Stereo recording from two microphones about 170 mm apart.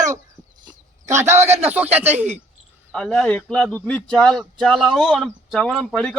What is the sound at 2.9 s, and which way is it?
Speech, 5° left (ahead or behind).